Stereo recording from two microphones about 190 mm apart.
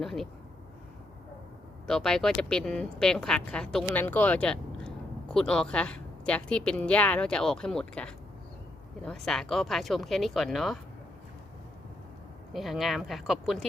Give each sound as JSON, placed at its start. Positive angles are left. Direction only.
{"t": 0.0, "sound": "a woman's voice", "side_deg": 0}
{"t": 1.9, "sound": "a woman's voice", "side_deg": 0}
{"t": 12.5, "sound": "a woman's voice", "side_deg": 0}